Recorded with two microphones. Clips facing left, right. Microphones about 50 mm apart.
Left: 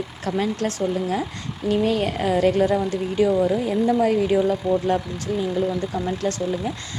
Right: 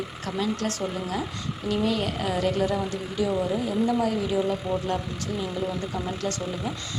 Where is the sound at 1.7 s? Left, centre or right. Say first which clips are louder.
Left 5 dB; left.